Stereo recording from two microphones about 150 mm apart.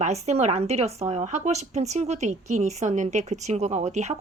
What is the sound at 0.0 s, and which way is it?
A woman's voice, 45° right (ahead or behind).